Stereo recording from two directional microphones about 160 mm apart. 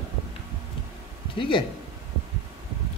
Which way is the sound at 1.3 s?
30° left (ahead or behind).